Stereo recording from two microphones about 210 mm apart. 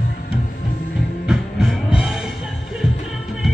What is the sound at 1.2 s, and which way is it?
Music, 5° right (ahead or behind).